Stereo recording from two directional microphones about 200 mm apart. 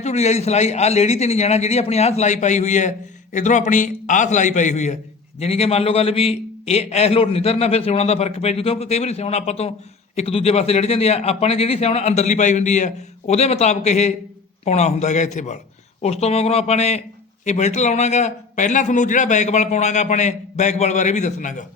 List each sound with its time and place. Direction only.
0.0 s a man's voice: 35° left (ahead or behind)